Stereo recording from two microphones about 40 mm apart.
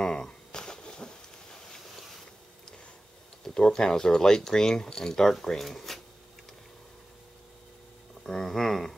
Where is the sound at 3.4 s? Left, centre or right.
Centre.